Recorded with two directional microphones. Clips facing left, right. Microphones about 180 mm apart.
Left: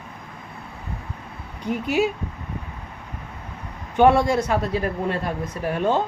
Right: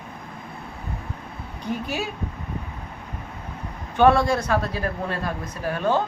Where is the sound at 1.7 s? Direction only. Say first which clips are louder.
Left 6 dB; 20° left (ahead or behind).